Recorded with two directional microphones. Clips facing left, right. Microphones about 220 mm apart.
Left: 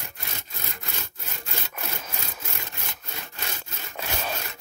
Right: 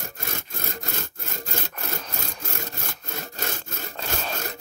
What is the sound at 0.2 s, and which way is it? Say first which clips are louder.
Sawing: right 6 dB; 45° right (ahead or behind).